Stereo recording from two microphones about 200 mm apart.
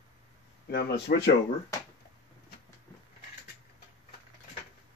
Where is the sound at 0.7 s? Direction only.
55° left (ahead or behind).